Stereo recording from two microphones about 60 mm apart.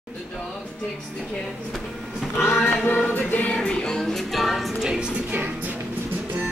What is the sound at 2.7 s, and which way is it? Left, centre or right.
Music, left.